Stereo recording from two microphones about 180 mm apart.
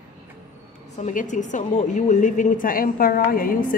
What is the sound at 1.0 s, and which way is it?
A woman's voice, 45° left (ahead or behind).